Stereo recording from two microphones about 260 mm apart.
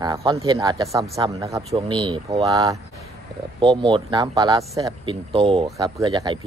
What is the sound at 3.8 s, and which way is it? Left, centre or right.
Speech, centre.